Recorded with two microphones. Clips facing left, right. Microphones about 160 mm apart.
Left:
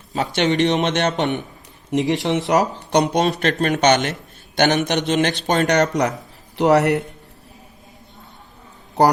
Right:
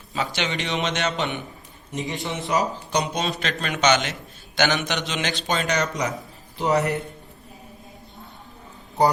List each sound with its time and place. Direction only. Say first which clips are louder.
0.2 s a man's voice: left 9 dB; 60° left (ahead or behind)
2.0 s speech: left 10 dB; 80° left; by 3.3 s 65° left (ahead or behind)
3.4 s a man's voice: left 2 dB; 55° left (ahead or behind); by 7.0 s 75° left (ahead or behind)